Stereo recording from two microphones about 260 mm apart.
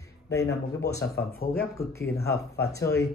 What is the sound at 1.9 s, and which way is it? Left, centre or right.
Speech, centre.